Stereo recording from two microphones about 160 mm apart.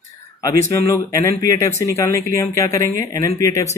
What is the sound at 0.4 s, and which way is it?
Speech, 20° left (ahead or behind).